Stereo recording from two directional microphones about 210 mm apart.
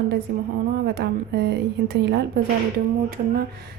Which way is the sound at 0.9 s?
50° right (ahead or behind).